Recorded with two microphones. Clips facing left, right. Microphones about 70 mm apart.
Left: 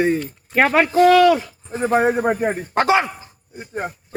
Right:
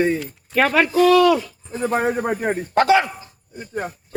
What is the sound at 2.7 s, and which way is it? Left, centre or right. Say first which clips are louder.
Speech: right 2 dB; left.